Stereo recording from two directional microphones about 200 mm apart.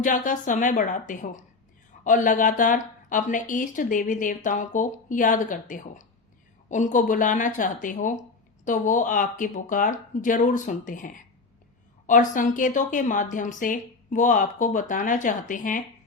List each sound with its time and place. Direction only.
0.0 s speech: 40° left (ahead or behind)